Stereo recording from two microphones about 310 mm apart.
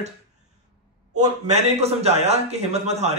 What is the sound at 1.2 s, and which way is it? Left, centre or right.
A man's voice, right.